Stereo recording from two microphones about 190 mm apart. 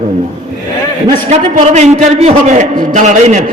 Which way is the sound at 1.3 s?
35° right (ahead or behind).